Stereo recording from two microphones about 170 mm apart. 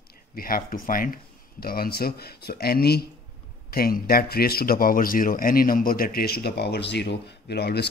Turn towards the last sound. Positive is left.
turn(degrees=70)  # may be behind; listen again after turning